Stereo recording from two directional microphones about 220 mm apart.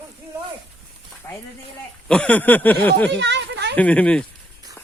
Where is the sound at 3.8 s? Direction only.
5° left (ahead or behind).